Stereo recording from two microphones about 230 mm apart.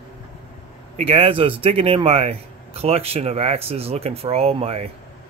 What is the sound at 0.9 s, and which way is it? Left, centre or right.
Speech, right.